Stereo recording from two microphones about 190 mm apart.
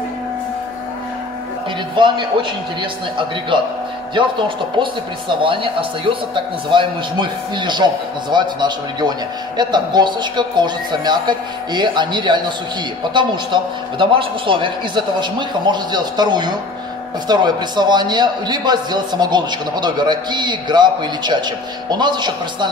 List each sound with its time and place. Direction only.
2.0 s a man's voice: 25° right (ahead or behind)
5.4 s a man's voice: 25° right (ahead or behind)